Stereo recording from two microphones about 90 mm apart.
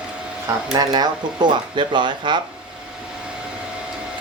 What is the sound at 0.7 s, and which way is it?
Speech, 50° right (ahead or behind).